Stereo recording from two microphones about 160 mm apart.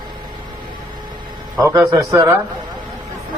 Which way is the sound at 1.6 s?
20° right (ahead or behind).